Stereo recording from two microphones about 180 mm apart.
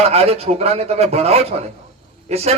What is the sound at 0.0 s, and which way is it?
A man's voice, 35° right (ahead or behind).